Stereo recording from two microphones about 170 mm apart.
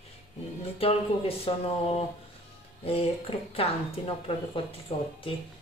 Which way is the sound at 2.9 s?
35° left (ahead or behind).